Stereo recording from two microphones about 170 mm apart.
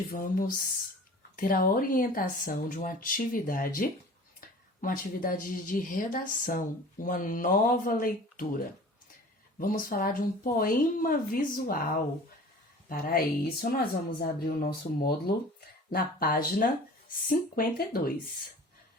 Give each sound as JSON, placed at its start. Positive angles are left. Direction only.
{"t": 0.1, "sound": "a woman's voice", "side_deg": 55}
{"t": 12.9, "sound": "a woman's voice", "side_deg": 60}